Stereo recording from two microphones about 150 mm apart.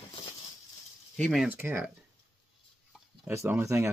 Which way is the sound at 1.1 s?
5° left (ahead or behind).